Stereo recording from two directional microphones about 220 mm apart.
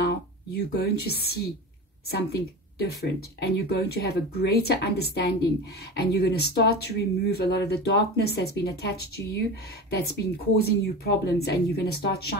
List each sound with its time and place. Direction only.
0.0 s speech: 50° left (ahead or behind)